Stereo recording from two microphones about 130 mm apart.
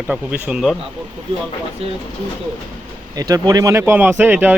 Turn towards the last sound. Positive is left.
turn(degrees=-10)  # may be behind; listen again after turning